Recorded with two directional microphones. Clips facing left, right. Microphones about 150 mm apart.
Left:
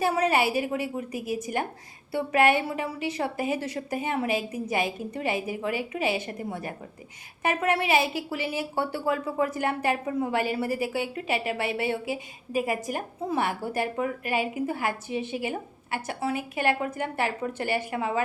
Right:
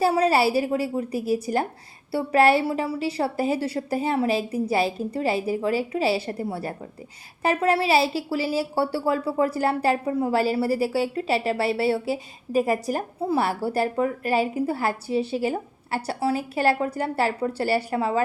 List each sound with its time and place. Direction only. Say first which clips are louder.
0.0 s speech: right 4 dB; 30° right (ahead or behind)